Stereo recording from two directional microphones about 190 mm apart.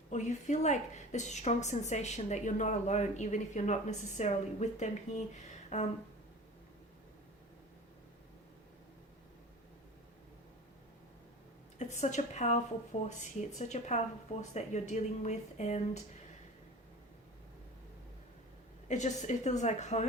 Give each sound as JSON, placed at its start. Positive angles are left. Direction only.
{"t": 0.1, "sound": "a woman's voice", "side_deg": 40}
{"t": 11.8, "sound": "a woman's voice", "side_deg": 40}
{"t": 18.9, "sound": "a woman's voice", "side_deg": 40}